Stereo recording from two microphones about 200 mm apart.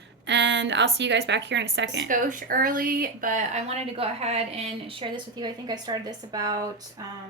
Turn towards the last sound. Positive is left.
turn(degrees=-20)  # may be behind; listen again after turning